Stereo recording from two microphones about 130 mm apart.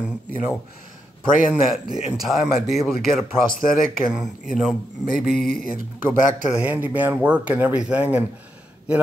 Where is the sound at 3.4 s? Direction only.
90° left.